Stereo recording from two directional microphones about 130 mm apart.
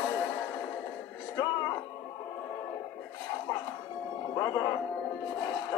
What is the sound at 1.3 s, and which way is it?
Music, 30° left (ahead or behind).